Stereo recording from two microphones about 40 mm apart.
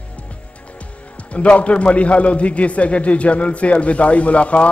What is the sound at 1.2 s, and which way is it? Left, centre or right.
A man's voice, left.